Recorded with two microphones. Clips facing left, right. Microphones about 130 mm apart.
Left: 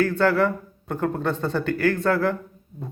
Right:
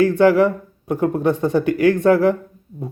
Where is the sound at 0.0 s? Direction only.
15° right (ahead or behind).